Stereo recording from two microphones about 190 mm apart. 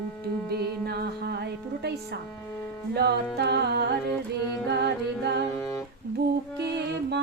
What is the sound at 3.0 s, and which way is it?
Music, 60° right (ahead or behind).